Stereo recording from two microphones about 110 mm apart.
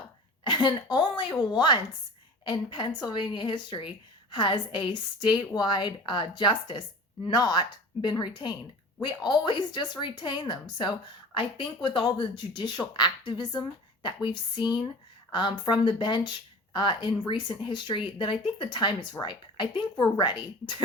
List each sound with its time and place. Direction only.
0.4 s speech: 45° left (ahead or behind)